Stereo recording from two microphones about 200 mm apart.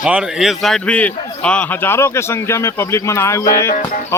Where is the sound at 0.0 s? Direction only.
5° right (ahead or behind).